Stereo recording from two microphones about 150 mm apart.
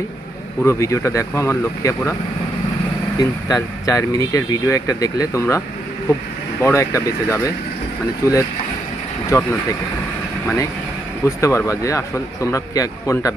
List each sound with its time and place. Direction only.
0.7 s speech: 20° left (ahead or behind)
3.2 s speech: 25° left (ahead or behind)
6.6 s speech: 20° left (ahead or behind)